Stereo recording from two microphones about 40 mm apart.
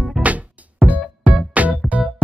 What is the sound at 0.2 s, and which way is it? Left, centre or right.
Music, right.